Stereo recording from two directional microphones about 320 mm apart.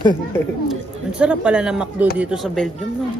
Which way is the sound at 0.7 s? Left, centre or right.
Centre.